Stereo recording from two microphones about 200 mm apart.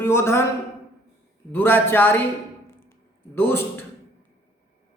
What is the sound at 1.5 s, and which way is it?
Speech, 10° left (ahead or behind).